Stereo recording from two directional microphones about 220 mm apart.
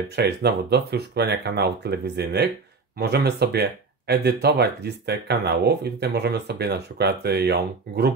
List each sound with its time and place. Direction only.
0.1 s speech: 45° right (ahead or behind)